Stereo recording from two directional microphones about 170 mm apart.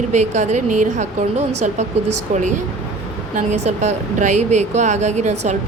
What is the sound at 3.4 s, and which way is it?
Speech, 40° right (ahead or behind).